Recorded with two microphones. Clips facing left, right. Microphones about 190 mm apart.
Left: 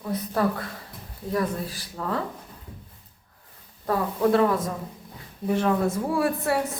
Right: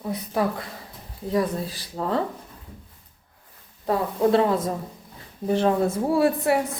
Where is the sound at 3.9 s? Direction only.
25° right (ahead or behind).